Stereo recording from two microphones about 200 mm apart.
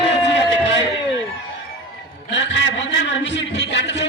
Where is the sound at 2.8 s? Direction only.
65° left (ahead or behind).